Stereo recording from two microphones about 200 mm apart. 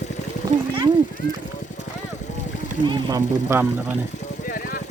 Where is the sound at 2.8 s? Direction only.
20° right (ahead or behind).